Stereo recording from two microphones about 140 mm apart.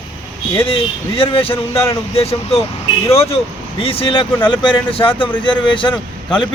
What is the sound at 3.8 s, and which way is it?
Speech, 40° left (ahead or behind).